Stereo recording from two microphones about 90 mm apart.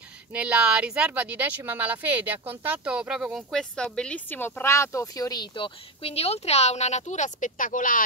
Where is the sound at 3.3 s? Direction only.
5° left (ahead or behind); by 5.7 s 50° left (ahead or behind).